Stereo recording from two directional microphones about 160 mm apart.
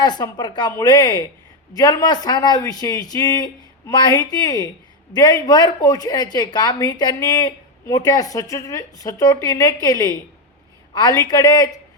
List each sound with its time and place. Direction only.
0.0 s a woman's voice: 25° left (ahead or behind)